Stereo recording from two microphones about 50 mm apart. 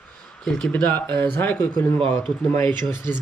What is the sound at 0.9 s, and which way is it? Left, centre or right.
Speech, left.